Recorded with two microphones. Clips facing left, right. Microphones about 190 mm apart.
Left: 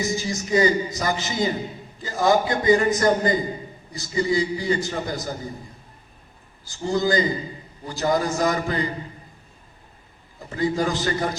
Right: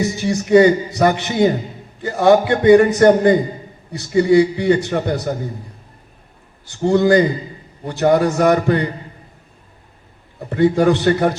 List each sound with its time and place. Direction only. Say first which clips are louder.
0.0 s a man's voice: right 6 dB; 65° right (ahead or behind)
6.7 s a man's voice: right 9 dB; 65° right (ahead or behind)
10.4 s a man's voice: right 9 dB; 65° right (ahead or behind)